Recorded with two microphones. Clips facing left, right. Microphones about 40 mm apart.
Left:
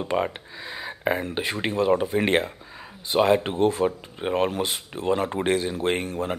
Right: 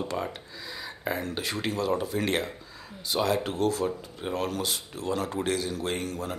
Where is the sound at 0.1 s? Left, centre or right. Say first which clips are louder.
Left 7 dB; left.